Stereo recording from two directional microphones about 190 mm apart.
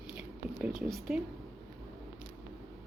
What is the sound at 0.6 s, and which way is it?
Speech, centre (ahead or behind).